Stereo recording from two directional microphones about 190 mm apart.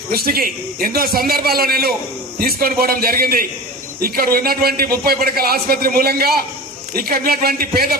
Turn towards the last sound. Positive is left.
turn(degrees=-50)  # may be behind; listen again after turning